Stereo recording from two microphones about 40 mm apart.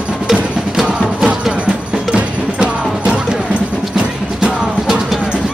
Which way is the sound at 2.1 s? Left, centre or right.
Right.